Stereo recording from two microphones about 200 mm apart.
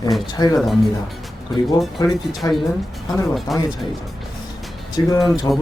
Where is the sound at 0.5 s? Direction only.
Centre (ahead or behind).